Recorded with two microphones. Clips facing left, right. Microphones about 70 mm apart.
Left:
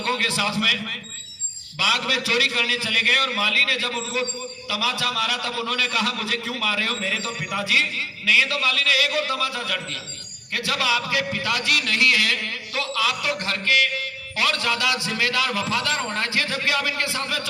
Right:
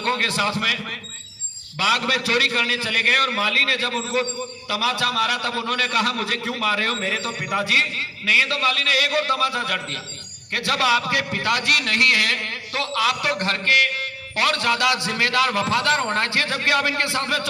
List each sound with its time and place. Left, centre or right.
0.0 s a man's voice: right
1.8 s a man's voice: right
16.0 s a man's voice: right